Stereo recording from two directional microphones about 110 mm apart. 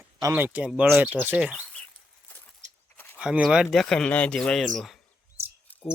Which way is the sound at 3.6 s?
5° left (ahead or behind).